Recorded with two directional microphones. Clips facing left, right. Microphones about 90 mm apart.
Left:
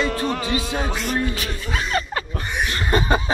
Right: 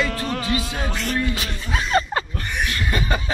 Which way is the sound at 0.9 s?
15° left (ahead or behind).